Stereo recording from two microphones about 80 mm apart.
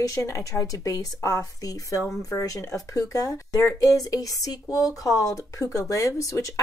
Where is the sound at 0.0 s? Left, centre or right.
Left.